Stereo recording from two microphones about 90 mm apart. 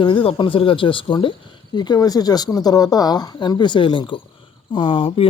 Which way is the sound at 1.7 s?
50° left (ahead or behind).